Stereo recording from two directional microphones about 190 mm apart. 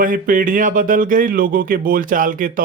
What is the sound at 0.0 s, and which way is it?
Speech, 45° right (ahead or behind).